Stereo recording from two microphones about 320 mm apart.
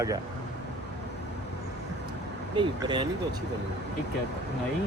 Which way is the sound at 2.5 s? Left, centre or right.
Centre.